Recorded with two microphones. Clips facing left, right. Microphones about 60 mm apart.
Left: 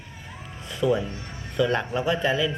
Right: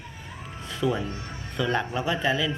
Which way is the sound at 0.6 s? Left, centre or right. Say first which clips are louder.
Left 3 dB; centre.